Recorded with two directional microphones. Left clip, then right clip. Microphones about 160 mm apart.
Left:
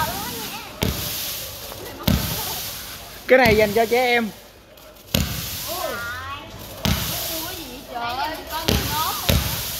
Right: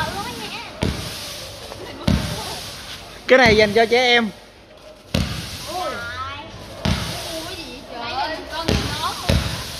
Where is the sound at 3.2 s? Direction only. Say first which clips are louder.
Right 2 dB; 5° right (ahead or behind).